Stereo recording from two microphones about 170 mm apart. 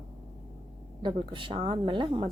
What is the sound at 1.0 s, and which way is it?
A woman's voice, 30° right (ahead or behind).